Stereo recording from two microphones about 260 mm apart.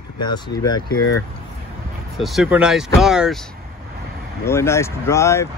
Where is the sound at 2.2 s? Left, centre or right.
Centre.